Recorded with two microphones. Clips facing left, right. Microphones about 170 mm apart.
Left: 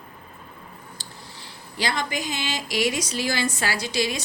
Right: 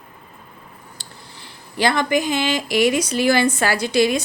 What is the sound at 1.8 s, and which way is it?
A woman's voice, 55° right (ahead or behind).